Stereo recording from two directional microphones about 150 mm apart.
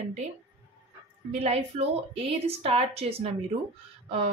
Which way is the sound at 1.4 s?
45° right (ahead or behind).